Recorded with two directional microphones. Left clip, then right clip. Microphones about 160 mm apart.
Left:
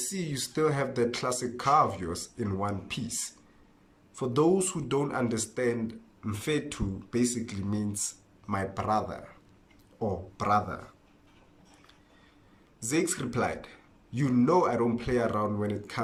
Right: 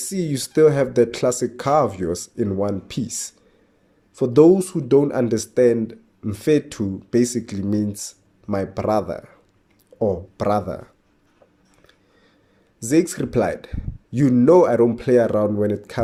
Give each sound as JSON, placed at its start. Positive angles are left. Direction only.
{"t": 0.1, "sound": "speech", "side_deg": -45}
{"t": 12.8, "sound": "speech", "side_deg": -40}